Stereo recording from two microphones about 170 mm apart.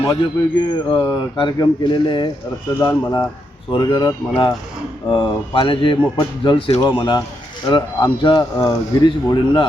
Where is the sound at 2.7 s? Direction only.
10° left (ahead or behind).